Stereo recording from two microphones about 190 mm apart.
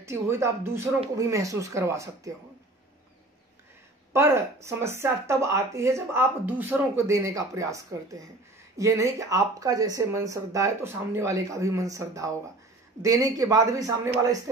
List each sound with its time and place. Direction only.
0.0 s speech: 15° right (ahead or behind)
4.1 s a man's voice: 15° right (ahead or behind)